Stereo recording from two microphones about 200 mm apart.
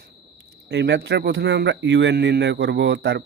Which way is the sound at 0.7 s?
60° right (ahead or behind).